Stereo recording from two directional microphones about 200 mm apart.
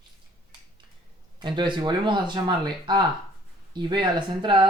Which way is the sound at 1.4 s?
25° right (ahead or behind).